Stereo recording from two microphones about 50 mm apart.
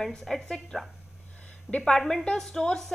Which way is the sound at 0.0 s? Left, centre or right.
Centre.